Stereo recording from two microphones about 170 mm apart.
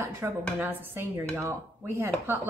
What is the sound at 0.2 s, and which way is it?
A woman's voice, 15° right (ahead or behind).